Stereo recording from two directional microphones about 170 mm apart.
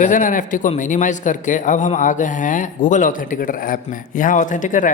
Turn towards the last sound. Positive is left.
turn(degrees=50)  # may be behind; listen again after turning